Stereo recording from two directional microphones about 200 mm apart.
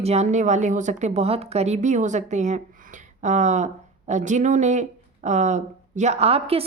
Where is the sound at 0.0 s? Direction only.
35° right (ahead or behind).